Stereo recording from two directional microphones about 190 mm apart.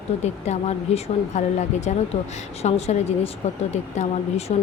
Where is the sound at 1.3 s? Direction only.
35° left (ahead or behind).